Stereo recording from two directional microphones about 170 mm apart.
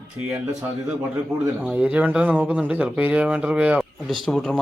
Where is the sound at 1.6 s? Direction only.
5° right (ahead or behind).